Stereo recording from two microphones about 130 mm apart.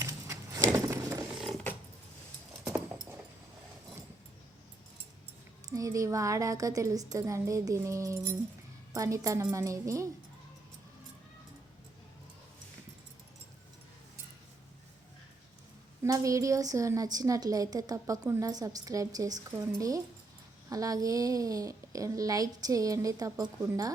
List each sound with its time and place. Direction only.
0.0 s a sound: 25° right (ahead or behind)
1.3 s mechanisms: 5° right (ahead or behind)
5.6 s a woman's voice: 25° right (ahead or behind)
16.0 s a woman's voice: 25° right (ahead or behind)